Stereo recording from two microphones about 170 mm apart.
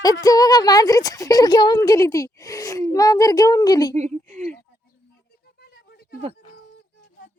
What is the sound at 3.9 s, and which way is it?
Speech, 40° right (ahead or behind).